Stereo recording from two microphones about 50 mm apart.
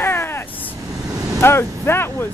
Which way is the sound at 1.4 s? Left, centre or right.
Left.